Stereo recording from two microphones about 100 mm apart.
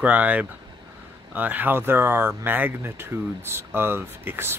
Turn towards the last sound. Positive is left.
turn(degrees=-20)  # may be behind; listen again after turning